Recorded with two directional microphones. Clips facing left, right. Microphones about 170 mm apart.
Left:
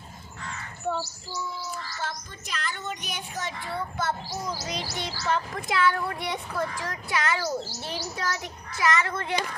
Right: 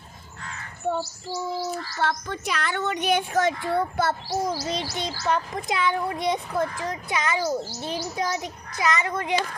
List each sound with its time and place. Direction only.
0.9 s speech: 65° right (ahead or behind); by 4.0 s 50° right (ahead or behind)
4.0 s speech: 70° right (ahead or behind)
4.6 s chirp: 25° right (ahead or behind)